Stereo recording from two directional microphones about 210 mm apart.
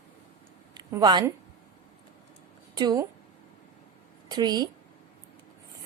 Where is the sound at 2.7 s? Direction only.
20° right (ahead or behind).